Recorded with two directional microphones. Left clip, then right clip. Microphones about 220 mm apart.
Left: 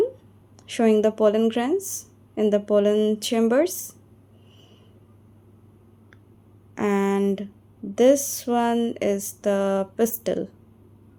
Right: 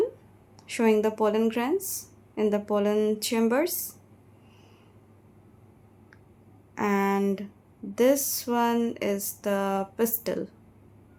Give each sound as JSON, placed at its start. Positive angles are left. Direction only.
{"t": 0.7, "sound": "a woman's voice", "side_deg": 15}
{"t": 6.7, "sound": "a woman's voice", "side_deg": 15}